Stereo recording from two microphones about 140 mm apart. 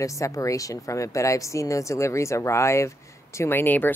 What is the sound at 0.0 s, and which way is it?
Speech, 25° left (ahead or behind).